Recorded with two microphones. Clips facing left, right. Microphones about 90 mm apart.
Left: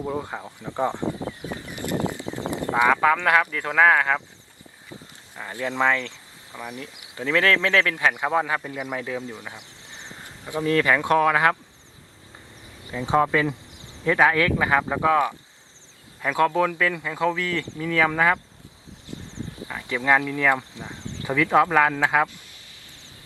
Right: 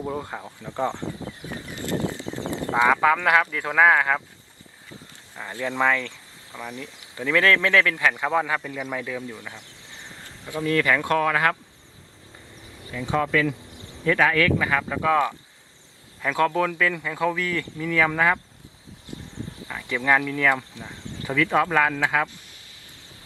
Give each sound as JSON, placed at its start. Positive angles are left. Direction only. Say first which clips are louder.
{"t": 0.0, "sound": "speech", "louder": "left 1 dB", "side_deg": 15}
{"t": 1.4, "sound": "a sound", "louder": "left 2 dB", "side_deg": 20}
{"t": 2.9, "sound": "speech", "louder": "even", "side_deg": -5}
{"t": 5.4, "sound": "speech", "louder": "even", "side_deg": 15}
{"t": 12.8, "sound": "speech", "louder": "left 4 dB", "side_deg": 20}
{"t": 19.1, "sound": "speech", "louder": "left 1 dB", "side_deg": 20}